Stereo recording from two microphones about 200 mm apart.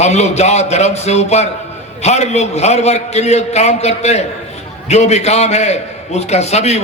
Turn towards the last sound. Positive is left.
turn(degrees=35)  # may be behind; listen again after turning